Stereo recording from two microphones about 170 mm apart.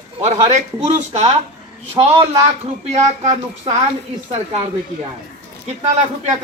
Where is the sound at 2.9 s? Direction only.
45° right (ahead or behind).